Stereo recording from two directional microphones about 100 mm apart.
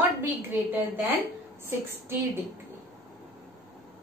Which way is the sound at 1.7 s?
25° right (ahead or behind).